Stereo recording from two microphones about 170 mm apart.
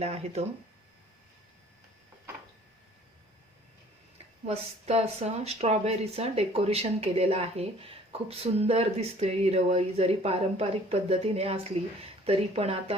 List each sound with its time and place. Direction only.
0.0 s speech: 40° right (ahead or behind)
4.4 s speech: 40° right (ahead or behind)